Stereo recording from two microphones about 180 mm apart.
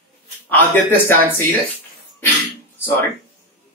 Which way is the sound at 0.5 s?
10° left (ahead or behind).